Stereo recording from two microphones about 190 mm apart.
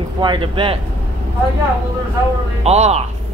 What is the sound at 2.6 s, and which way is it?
Speech, 35° right (ahead or behind).